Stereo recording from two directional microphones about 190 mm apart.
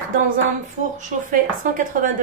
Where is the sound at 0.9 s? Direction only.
40° right (ahead or behind).